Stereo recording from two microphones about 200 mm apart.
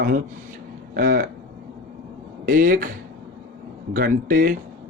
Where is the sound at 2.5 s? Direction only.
45° right (ahead or behind).